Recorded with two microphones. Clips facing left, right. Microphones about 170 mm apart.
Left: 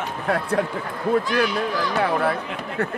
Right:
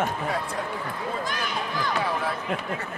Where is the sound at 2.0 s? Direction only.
65° left (ahead or behind).